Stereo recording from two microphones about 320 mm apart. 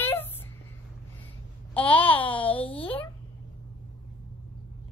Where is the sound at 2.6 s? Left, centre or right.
Centre.